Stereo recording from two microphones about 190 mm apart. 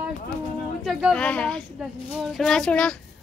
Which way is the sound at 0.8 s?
Centre (ahead or behind).